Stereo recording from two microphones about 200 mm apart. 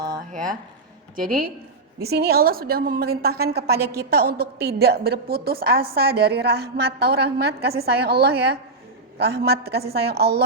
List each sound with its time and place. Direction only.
2.0 s a woman's voice: 50° right (ahead or behind)